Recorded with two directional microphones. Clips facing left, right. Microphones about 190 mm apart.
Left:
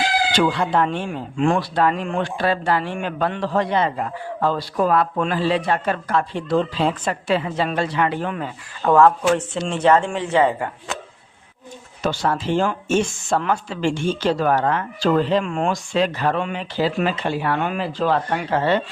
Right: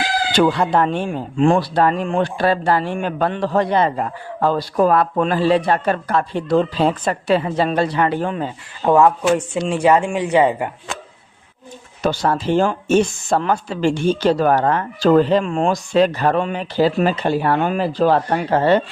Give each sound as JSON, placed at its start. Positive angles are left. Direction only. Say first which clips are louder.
{"t": 0.4, "sound": "speech", "louder": "right 3 dB", "side_deg": -40}
{"t": 12.0, "sound": "speech", "louder": "right 3 dB", "side_deg": -40}